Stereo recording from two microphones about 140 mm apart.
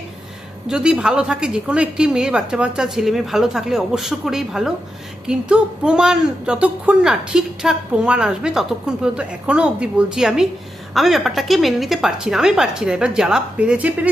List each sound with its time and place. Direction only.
0.7 s speech: 5° right (ahead or behind)